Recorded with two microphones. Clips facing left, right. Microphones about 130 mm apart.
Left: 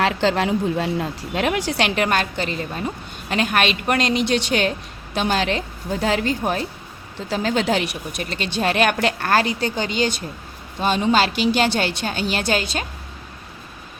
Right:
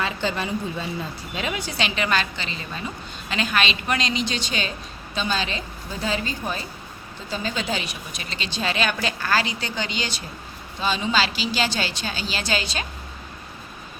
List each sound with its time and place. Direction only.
0.0 s a woman's voice: 90° left; by 12.8 s 50° left (ahead or behind)